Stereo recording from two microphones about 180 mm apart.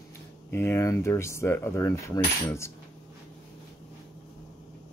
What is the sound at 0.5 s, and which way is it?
Speech, 10° left (ahead or behind).